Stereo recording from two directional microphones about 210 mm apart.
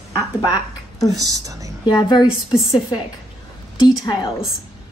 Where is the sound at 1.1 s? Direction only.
15° right (ahead or behind).